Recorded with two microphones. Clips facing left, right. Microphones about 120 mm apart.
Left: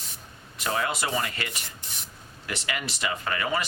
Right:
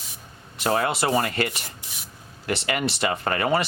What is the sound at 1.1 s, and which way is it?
Speech, 45° right (ahead or behind).